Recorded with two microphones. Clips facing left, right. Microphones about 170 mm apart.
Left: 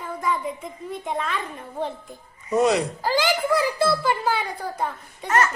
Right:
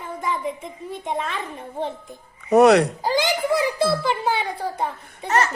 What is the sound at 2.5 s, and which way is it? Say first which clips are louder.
Speech: right 6 dB; 70° right (ahead or behind).